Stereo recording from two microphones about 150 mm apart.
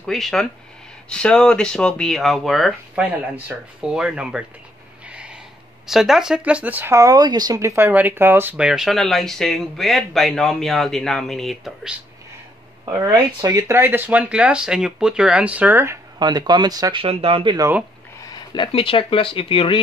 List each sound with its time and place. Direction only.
0.0 s speech: centre (ahead or behind)
5.0 s a sound: 5° right (ahead or behind)
5.9 s speech: 5° right (ahead or behind)
12.9 s speech: 20° right (ahead or behind)
16.2 s speech: 30° right (ahead or behind)
17.0 s speech: 40° right (ahead or behind)
18.3 s a sound: 30° left (ahead or behind)
18.7 s speech: 35° left (ahead or behind)